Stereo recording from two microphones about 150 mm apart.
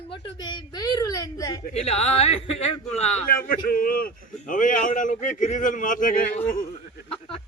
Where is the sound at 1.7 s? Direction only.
45° left (ahead or behind).